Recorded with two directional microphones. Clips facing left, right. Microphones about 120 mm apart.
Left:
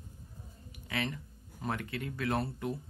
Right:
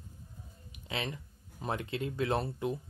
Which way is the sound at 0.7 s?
20° right (ahead or behind).